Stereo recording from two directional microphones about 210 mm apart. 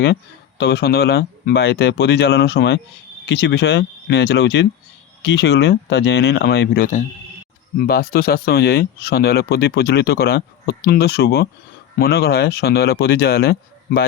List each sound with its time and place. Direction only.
0.6 s speech: 50° left (ahead or behind)